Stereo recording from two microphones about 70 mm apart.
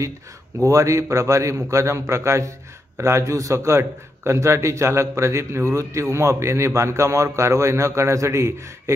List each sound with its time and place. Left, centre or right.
0.7 s a man's voice: right